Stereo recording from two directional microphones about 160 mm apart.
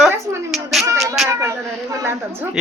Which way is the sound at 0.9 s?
Centre (ahead or behind).